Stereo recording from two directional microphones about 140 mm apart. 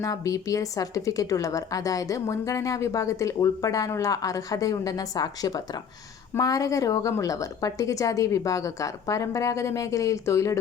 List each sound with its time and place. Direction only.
0.0 s speech: 25° left (ahead or behind)